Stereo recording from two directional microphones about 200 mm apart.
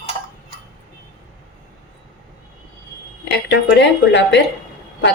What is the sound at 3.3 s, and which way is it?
A woman's voice, 60° left (ahead or behind).